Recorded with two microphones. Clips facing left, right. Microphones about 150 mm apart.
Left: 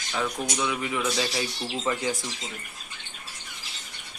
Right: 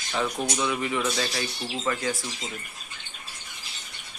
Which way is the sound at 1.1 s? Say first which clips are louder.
Left 1 dB; 15° left (ahead or behind).